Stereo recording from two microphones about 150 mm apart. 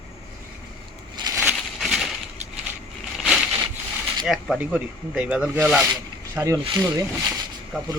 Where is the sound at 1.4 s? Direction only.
Centre (ahead or behind).